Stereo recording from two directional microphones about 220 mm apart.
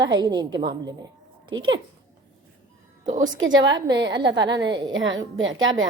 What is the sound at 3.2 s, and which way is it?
A woman's voice, 60° right (ahead or behind).